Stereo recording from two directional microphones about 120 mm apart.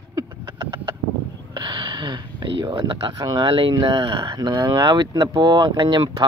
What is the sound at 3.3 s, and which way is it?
Speech, 45° right (ahead or behind).